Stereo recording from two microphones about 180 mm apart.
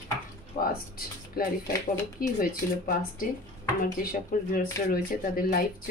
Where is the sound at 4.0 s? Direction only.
50° left (ahead or behind).